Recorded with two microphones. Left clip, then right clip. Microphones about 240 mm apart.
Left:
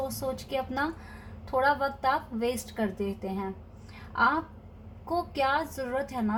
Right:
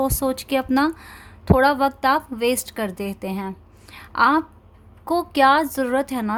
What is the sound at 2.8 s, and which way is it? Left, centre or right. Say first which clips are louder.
Speech: right 5 dB; right.